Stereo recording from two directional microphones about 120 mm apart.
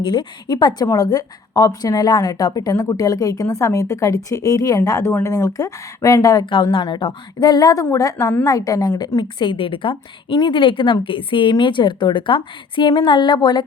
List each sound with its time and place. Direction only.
0.0 s a woman's voice: 35° left (ahead or behind)
6.4 s a woman's voice: 40° left (ahead or behind)